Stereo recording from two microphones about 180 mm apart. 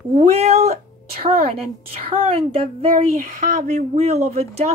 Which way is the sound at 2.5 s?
30° right (ahead or behind).